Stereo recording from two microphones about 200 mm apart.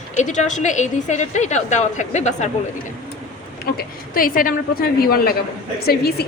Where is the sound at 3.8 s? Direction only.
45° left (ahead or behind).